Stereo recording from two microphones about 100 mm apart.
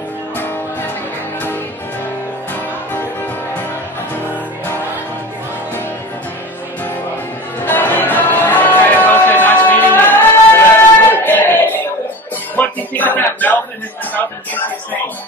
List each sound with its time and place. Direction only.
7.6 s music: 20° left (ahead or behind)